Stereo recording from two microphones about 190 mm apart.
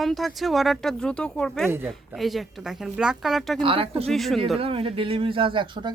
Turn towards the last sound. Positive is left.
turn(degrees=-25)  # may be behind; listen again after turning